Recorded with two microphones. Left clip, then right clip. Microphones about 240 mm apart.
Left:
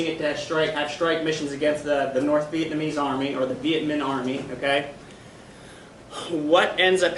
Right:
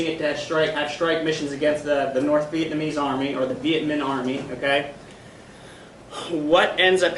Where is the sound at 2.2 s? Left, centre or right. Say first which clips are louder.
Right 1 dB; centre.